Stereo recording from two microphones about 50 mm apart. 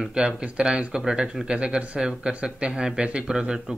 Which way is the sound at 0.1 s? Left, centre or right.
Centre.